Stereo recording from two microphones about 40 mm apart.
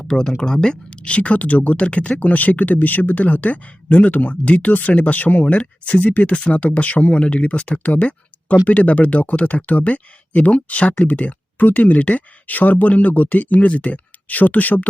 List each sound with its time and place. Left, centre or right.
0.0 s speech: centre; by 14.8 s left